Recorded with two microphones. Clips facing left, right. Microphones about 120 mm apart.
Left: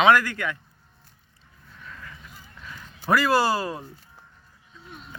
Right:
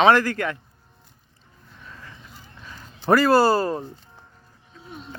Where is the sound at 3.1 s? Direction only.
45° right (ahead or behind).